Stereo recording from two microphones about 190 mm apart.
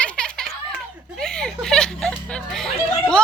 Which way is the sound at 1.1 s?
5° left (ahead or behind).